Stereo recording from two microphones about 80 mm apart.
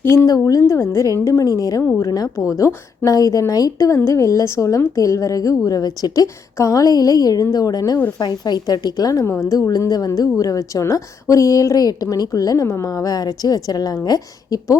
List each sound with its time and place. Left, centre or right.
0.0 s a woman's voice: left
0.3 s speech: left
8.2 s a woman's voice: left